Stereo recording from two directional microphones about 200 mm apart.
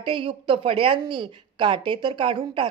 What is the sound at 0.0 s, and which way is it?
A woman's voice, 25° right (ahead or behind).